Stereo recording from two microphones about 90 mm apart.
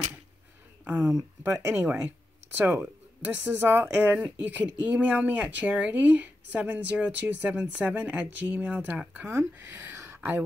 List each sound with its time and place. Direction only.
0.8 s speech: 15° right (ahead or behind)
1.4 s speech: 25° right (ahead or behind)